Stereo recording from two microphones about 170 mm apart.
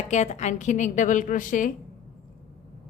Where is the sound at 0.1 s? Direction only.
45° left (ahead or behind).